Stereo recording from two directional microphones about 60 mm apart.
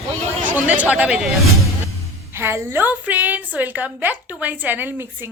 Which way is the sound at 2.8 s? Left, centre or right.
Right.